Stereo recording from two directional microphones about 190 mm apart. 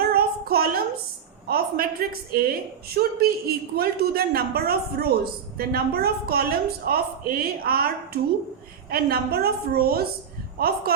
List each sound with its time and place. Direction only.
0.0 s child singing: 55° right (ahead or behind)
1.5 s a woman's voice: 50° right (ahead or behind)
8.9 s a woman's voice: 55° right (ahead or behind)